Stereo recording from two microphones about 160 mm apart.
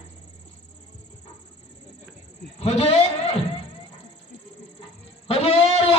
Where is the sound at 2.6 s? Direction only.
40° left (ahead or behind).